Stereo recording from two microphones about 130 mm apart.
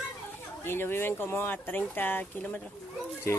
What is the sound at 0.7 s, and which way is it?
Speech, 15° left (ahead or behind).